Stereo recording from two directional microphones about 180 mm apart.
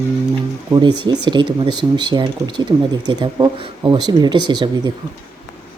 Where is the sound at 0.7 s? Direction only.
25° right (ahead or behind).